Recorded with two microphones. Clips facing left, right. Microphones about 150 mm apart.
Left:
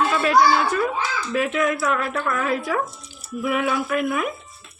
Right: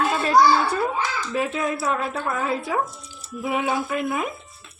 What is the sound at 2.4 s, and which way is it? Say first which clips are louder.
Speech: right 1 dB; 25° right (ahead or behind).